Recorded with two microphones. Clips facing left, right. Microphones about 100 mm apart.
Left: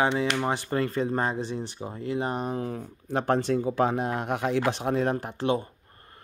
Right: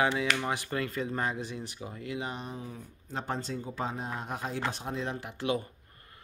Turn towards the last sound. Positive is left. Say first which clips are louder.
# left 5 dB
turn(degrees=35)  # may be behind; listen again after turning